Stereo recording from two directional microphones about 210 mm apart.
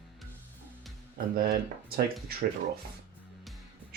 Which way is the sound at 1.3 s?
45° right (ahead or behind).